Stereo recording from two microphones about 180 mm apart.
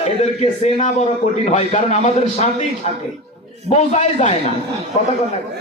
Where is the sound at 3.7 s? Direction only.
40° left (ahead or behind).